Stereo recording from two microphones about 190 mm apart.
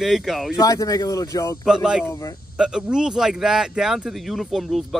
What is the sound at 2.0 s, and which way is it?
Speech, 15° left (ahead or behind).